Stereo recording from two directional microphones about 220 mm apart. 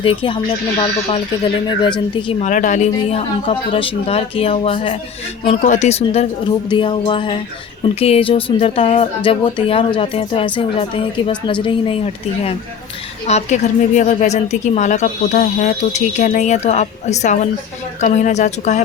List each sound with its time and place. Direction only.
0.0 s speech: 25° left (ahead or behind)
2.2 s speech: 35° left (ahead or behind)
13.2 s speech: 30° left (ahead or behind)